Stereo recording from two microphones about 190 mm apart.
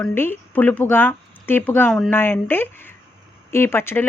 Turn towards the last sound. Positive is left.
turn(degrees=10)  # may be behind; listen again after turning